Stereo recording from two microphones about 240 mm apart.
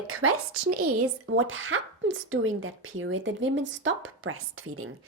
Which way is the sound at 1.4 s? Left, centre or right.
Right.